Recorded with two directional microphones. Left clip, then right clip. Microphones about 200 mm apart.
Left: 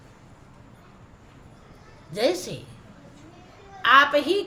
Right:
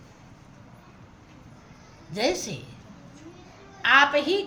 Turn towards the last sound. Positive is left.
turn(degrees=20)  # may be behind; listen again after turning